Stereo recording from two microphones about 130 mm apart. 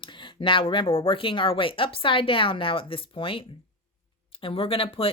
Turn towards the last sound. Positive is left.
turn(degrees=45)  # may be behind; listen again after turning